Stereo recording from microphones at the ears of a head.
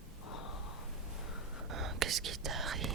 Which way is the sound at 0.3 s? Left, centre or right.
Left.